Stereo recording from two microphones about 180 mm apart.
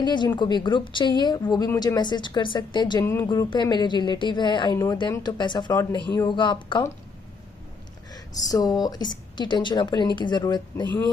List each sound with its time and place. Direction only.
0.0 s speech: 25° left (ahead or behind)
8.1 s speech: 20° left (ahead or behind)